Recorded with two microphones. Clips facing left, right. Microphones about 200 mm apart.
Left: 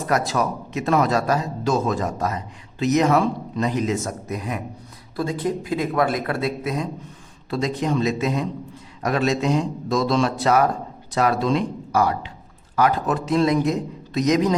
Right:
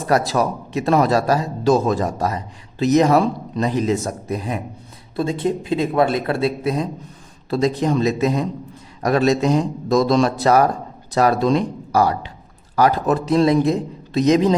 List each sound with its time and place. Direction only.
0.1 s a man's voice: 30° right (ahead or behind)